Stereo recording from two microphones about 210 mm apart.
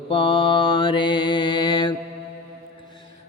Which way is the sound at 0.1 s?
25° left (ahead or behind).